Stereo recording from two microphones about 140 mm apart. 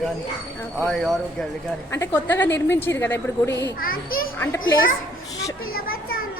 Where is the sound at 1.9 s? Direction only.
15° left (ahead or behind).